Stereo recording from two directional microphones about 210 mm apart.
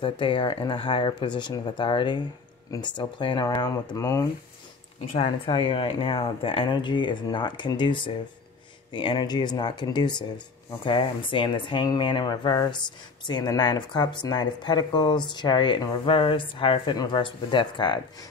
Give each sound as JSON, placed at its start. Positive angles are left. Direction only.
{"t": 0.0, "sound": "speech", "side_deg": 25}
{"t": 5.1, "sound": "speech", "side_deg": 25}